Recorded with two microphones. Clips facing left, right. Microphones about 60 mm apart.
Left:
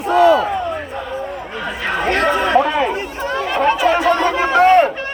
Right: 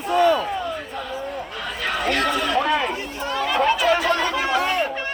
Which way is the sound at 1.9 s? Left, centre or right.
Left.